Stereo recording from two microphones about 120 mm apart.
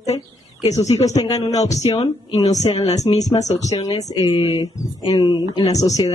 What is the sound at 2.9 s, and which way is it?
Speech, 30° left (ahead or behind).